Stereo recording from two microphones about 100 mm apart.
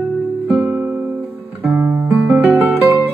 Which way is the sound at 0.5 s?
10° right (ahead or behind).